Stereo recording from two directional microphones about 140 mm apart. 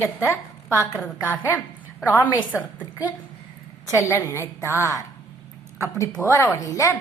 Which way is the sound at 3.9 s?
20° left (ahead or behind).